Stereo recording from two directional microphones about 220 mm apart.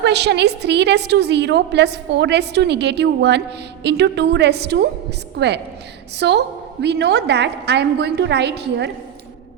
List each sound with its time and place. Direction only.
0.0 s a woman's voice: 50° right (ahead or behind)